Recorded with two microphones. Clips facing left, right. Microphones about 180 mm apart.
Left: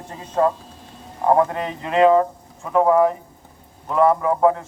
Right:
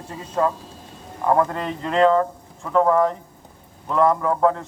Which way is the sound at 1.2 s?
20° left (ahead or behind).